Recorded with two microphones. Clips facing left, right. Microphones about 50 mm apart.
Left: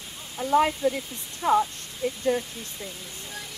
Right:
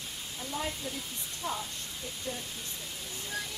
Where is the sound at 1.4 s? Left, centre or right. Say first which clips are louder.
Left 15 dB; left.